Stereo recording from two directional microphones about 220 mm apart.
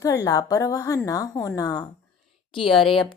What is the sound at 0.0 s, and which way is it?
A woman's voice, 15° left (ahead or behind).